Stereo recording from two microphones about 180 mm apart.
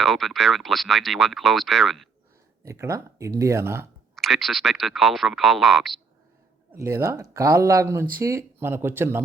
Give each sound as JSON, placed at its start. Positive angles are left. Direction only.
{"t": 0.0, "sound": "speech", "side_deg": 0}
{"t": 2.6, "sound": "speech", "side_deg": -15}
{"t": 4.1, "sound": "speech", "side_deg": 0}
{"t": 6.7, "sound": "speech", "side_deg": -15}